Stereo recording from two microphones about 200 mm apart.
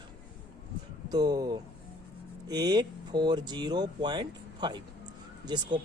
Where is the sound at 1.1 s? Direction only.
20° right (ahead or behind).